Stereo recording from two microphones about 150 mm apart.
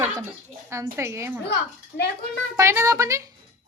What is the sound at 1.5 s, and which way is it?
Speech, 90° left.